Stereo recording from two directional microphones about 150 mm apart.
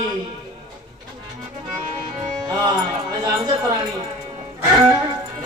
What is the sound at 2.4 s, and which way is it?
Music, 25° right (ahead or behind).